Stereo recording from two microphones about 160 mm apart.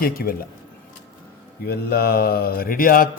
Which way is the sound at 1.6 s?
80° left.